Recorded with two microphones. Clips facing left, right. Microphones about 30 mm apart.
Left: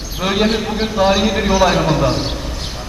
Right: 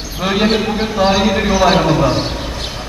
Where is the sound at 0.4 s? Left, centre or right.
Centre.